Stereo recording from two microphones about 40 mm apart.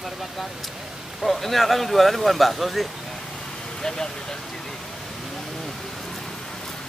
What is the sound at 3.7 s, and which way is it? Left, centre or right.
Speech, centre.